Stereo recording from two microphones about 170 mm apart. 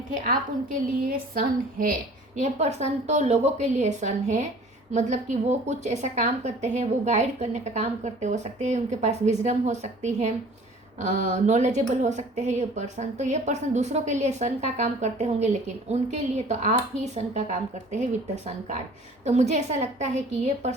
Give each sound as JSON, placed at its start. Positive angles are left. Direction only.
{"t": 1.1, "sound": "a woman's voice", "side_deg": -55}
{"t": 19.2, "sound": "speech", "side_deg": -40}